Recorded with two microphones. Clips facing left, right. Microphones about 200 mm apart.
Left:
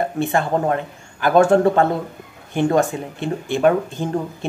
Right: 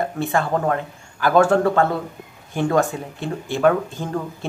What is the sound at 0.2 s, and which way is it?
Speech, 20° left (ahead or behind).